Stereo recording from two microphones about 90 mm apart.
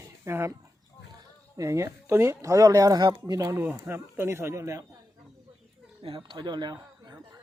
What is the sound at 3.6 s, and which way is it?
Speech, 25° right (ahead or behind).